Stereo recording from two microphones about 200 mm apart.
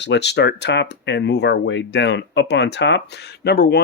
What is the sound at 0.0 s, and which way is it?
Speech, 60° left (ahead or behind).